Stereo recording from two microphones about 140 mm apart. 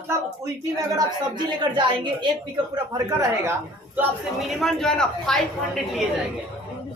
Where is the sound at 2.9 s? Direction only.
25° right (ahead or behind).